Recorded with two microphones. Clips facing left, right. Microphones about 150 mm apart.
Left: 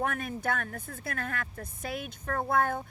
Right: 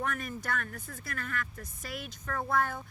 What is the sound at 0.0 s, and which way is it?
Speech, 55° left (ahead or behind).